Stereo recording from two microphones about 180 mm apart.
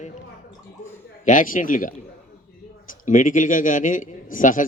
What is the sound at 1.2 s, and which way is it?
A man's voice, 45° left (ahead or behind).